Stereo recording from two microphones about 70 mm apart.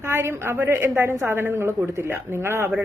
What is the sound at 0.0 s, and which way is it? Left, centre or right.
Speech, right.